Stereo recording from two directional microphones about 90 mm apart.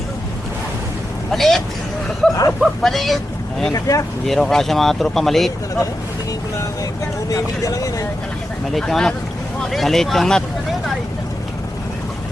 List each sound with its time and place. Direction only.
1.3 s speech: centre (ahead or behind)
3.7 s speech: 40° left (ahead or behind)
4.3 s speech: 5° left (ahead or behind)
6.6 s speech: 35° left (ahead or behind)
8.7 s speech: 5° left (ahead or behind)